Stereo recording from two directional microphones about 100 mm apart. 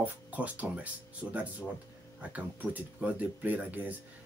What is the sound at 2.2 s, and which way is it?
Speech, 15° right (ahead or behind).